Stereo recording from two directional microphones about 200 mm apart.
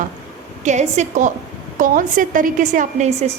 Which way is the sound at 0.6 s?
35° right (ahead or behind).